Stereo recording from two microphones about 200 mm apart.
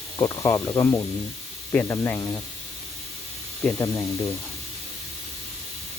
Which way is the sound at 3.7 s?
15° left (ahead or behind).